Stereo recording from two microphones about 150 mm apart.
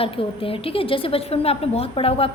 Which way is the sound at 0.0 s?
40° left (ahead or behind).